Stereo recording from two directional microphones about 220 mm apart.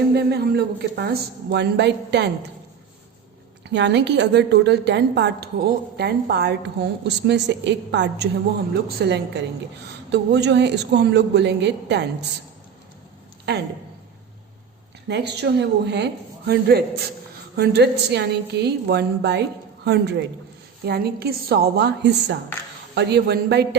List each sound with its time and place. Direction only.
0.1 s a woman's voice: 45° right (ahead or behind)
3.6 s a woman's voice: 50° right (ahead or behind)
13.5 s a woman's voice: 50° right (ahead or behind)
15.0 s a woman's voice: 50° right (ahead or behind)